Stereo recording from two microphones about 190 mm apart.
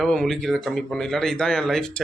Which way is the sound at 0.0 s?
5° left (ahead or behind).